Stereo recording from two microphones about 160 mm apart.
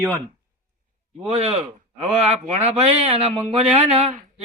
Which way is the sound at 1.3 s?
40° right (ahead or behind).